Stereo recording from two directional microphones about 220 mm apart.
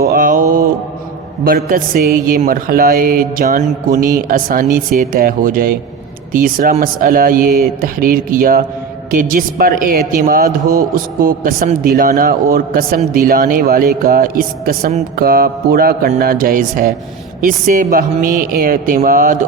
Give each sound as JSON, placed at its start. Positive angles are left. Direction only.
{"t": 0.0, "sound": "mantra", "side_deg": -40}
{"t": 1.5, "sound": "speech", "side_deg": -40}